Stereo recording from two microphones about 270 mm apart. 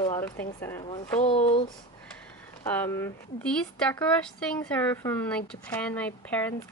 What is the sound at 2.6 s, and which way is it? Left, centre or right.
A woman's voice, centre.